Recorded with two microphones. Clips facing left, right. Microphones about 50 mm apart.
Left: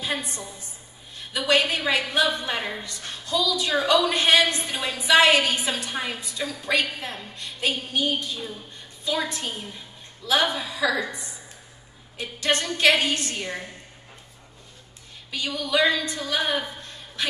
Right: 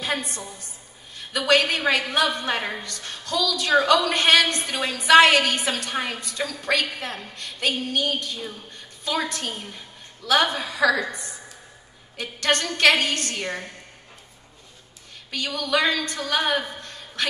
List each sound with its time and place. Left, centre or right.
0.0 s a woman's voice: right
15.3 s a woman's voice: right